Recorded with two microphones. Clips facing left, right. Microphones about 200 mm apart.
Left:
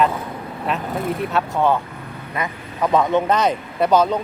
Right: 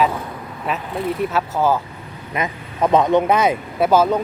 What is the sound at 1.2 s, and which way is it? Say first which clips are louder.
Speech: even; centre (ahead or behind).